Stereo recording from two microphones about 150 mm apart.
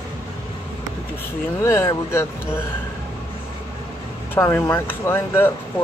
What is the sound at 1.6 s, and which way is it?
Speech, 15° left (ahead or behind).